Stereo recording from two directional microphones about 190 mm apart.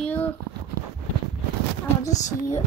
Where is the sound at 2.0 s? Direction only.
15° left (ahead or behind).